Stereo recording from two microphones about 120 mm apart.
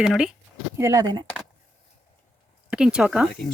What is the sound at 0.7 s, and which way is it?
Speech, 25° right (ahead or behind).